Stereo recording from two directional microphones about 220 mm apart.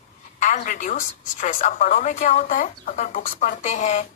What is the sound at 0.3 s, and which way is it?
A woman's voice, 35° left (ahead or behind).